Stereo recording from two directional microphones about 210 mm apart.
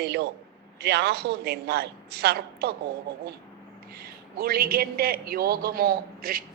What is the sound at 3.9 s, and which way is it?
A man's voice, 45° right (ahead or behind).